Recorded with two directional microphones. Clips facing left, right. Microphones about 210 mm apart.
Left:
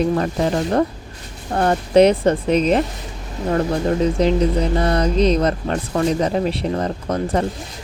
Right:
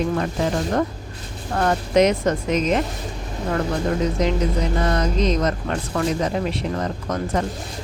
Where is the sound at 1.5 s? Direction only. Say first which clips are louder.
Left 4 dB; 30° left (ahead or behind).